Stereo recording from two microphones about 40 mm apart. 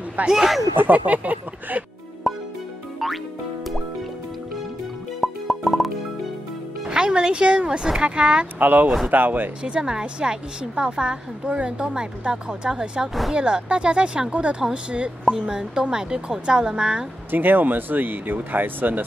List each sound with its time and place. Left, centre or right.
0.3 s speech: centre
0.7 s speech: right
5.2 s music: centre
6.9 s a woman's voice: centre
8.5 s speech: right
9.6 s a woman's voice: right
17.3 s speech: right